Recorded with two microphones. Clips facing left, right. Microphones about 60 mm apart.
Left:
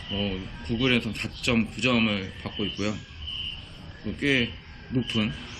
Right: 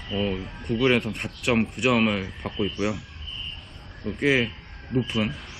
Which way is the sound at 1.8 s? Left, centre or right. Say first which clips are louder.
Right 4 dB; centre.